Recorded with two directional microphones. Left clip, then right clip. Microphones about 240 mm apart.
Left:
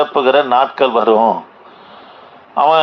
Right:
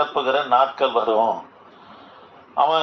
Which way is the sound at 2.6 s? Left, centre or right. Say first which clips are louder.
Left 7 dB; left.